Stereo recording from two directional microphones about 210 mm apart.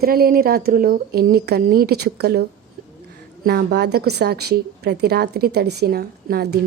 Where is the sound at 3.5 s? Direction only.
50° right (ahead or behind).